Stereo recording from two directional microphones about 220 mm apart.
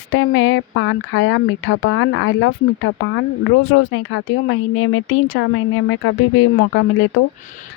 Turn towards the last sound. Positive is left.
turn(degrees=60)  # may be behind; listen again after turning